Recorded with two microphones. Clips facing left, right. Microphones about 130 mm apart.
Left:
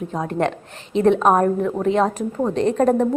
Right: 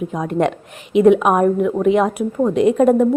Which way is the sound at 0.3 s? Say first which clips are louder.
Right 5 dB; 15° right (ahead or behind).